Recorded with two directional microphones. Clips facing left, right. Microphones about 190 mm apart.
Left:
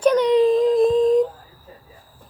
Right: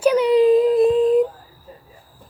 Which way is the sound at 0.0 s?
10° right (ahead or behind).